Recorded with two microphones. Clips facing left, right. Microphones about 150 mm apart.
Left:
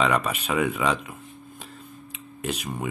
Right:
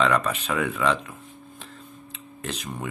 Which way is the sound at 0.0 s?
10° left (ahead or behind).